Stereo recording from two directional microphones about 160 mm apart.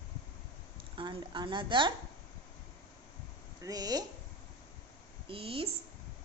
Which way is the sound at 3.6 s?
25° right (ahead or behind).